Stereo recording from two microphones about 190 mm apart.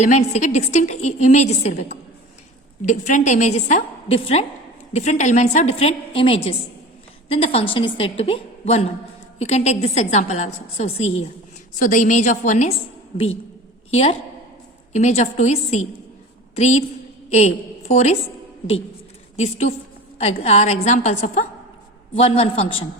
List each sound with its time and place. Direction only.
0.0 s a woman's voice: 40° left (ahead or behind)
13.9 s a woman's voice: 30° left (ahead or behind)
20.4 s a woman's voice: 35° left (ahead or behind)